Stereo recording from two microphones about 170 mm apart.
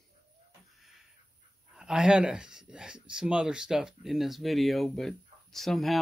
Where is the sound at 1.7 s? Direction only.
5° right (ahead or behind).